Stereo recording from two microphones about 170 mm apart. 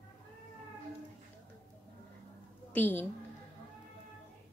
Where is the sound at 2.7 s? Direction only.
10° left (ahead or behind).